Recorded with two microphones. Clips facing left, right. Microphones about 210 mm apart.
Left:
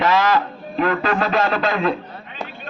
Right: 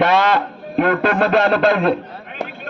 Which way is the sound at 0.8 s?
65° right (ahead or behind).